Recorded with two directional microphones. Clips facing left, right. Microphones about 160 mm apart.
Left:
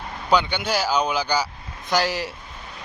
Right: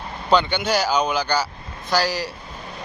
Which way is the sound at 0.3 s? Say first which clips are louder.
Right 2 dB; 10° left (ahead or behind).